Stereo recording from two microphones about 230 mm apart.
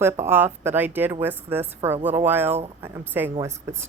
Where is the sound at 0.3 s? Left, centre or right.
Centre.